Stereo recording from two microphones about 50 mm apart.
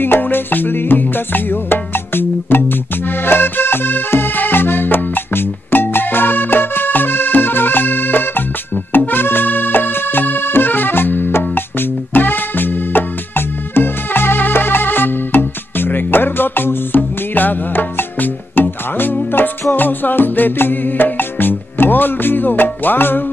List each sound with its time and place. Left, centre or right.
0.0 s music: left